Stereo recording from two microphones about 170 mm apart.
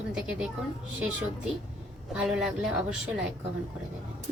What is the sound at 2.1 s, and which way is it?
A woman's voice, 5° right (ahead or behind).